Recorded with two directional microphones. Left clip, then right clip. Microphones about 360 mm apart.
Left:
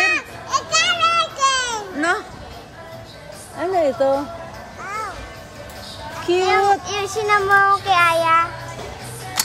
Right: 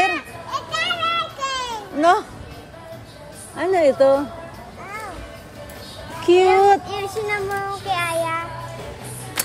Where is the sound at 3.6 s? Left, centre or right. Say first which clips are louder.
Right 2 dB; centre.